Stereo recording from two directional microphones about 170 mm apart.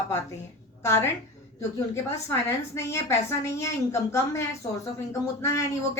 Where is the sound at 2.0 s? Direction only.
15° left (ahead or behind).